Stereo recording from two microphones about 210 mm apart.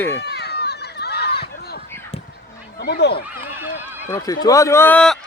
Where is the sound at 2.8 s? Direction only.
50° left (ahead or behind).